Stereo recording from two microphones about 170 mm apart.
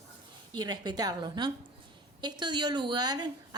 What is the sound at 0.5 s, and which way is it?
Speech, 25° right (ahead or behind).